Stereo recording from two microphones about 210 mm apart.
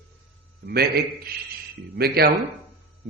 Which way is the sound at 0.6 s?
50° right (ahead or behind).